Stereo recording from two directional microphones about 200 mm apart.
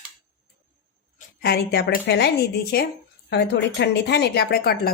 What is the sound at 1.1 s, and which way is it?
Speech, 50° left (ahead or behind).